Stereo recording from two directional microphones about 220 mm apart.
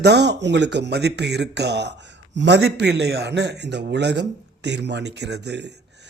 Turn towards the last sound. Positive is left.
turn(degrees=-50)  # may be behind; listen again after turning